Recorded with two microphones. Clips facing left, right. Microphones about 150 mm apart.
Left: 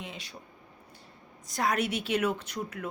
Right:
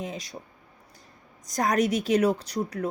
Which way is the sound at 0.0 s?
40° right (ahead or behind).